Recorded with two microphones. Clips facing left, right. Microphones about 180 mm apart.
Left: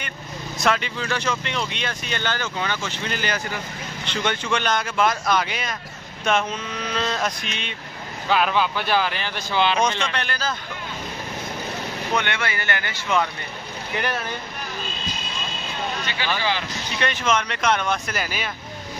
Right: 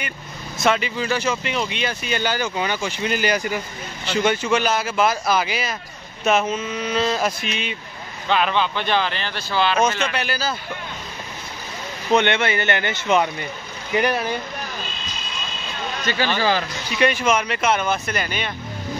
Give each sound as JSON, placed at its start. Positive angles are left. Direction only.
{"t": 0.6, "sound": "speech", "side_deg": -5}
{"t": 9.8, "sound": "speech", "side_deg": -5}
{"t": 12.1, "sound": "speech", "side_deg": -25}
{"t": 16.3, "sound": "speech", "side_deg": -40}
{"t": 17.0, "sound": "speech", "side_deg": -10}